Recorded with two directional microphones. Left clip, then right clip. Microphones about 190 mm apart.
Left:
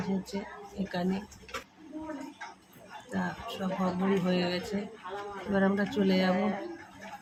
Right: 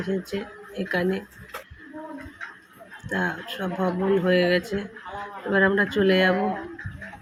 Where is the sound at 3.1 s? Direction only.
20° right (ahead or behind).